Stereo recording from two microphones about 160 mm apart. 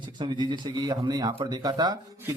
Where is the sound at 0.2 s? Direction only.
30° right (ahead or behind).